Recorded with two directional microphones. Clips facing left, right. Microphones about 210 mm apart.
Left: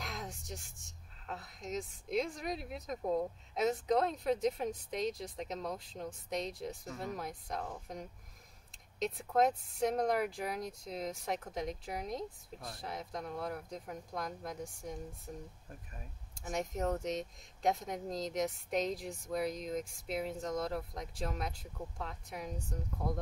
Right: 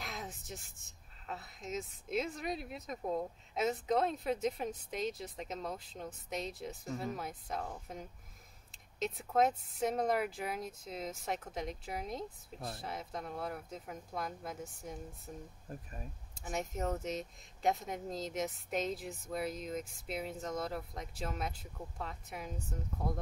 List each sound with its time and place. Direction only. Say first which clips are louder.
0.0 s speech: left 1 dB; centre (ahead or behind)
12.5 s speech: right 6 dB; 25° right (ahead or behind)
12.8 s speech: left 4 dB; centre (ahead or behind)
16.3 s speech: left 2 dB; centre (ahead or behind)